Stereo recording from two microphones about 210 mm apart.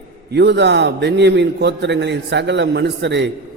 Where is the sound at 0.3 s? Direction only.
55° right (ahead or behind).